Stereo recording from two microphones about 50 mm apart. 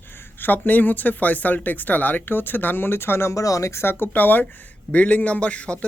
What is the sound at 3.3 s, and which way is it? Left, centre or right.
Speech, left.